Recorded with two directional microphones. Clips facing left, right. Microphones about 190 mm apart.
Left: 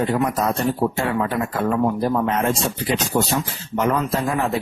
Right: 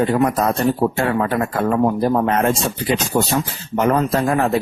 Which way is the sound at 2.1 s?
55° right (ahead or behind).